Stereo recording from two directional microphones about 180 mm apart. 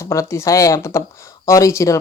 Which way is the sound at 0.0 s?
15° left (ahead or behind).